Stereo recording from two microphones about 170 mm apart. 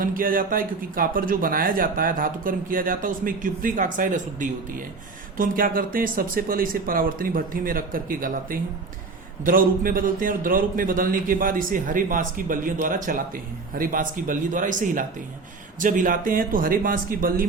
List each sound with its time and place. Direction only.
0.0 s a man's voice: 55° right (ahead or behind)